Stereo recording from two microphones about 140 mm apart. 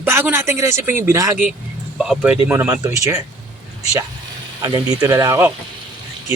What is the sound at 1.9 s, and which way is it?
Speech, 5° right (ahead or behind).